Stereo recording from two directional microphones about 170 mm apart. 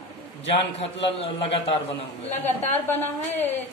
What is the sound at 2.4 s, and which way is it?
A woman's voice, 10° left (ahead or behind).